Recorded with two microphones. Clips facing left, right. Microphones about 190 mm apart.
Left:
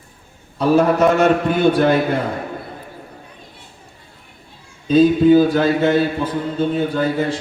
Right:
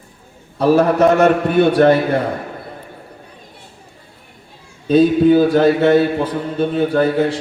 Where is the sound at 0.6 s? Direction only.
60° right (ahead or behind).